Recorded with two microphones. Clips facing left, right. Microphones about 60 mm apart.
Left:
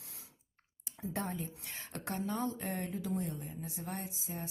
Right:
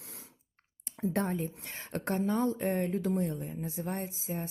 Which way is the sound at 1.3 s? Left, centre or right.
Right.